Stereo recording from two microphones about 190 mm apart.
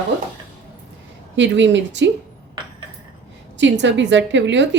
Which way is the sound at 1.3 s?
70° right (ahead or behind).